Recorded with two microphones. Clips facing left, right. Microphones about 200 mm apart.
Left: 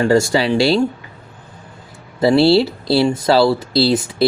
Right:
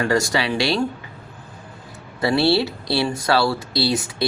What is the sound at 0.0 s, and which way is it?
Speech, 30° left (ahead or behind).